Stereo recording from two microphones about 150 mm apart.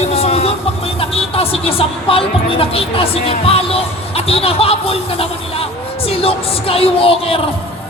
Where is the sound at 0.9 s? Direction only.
40° left (ahead or behind).